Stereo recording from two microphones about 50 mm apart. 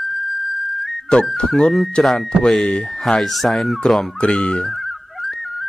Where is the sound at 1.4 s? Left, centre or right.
Centre.